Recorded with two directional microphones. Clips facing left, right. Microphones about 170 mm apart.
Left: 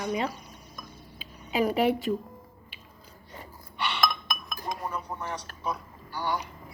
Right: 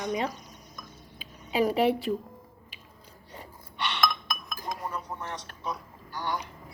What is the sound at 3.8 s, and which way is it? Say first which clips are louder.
Chink: even; 5° left (ahead or behind).